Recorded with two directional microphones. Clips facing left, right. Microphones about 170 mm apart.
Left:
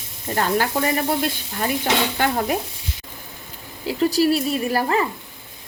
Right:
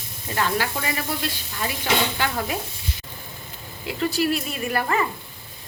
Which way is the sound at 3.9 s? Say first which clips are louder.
Left 5 dB; 35° left (ahead or behind).